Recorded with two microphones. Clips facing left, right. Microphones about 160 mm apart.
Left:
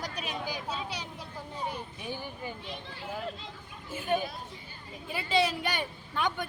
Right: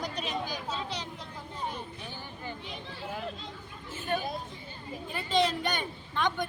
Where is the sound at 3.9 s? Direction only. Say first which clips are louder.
Left 2 dB; 15° left (ahead or behind).